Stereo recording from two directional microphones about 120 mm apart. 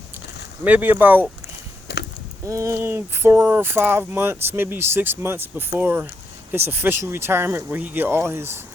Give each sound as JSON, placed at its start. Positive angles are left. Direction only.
{"t": 0.6, "sound": "speech", "side_deg": -15}
{"t": 2.5, "sound": "speech", "side_deg": -25}